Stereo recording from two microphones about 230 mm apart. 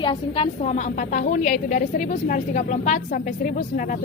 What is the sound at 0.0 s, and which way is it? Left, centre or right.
A woman's voice, left.